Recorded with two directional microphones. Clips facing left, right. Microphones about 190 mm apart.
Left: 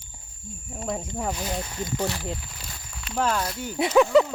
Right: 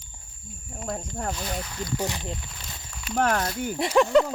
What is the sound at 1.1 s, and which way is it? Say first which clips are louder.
Speech: left 2 dB; 5° left (ahead or behind).